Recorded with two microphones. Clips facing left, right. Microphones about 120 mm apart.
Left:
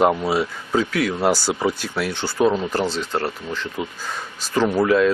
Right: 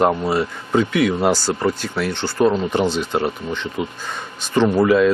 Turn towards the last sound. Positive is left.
turn(degrees=0)  # may be behind; listen again after turning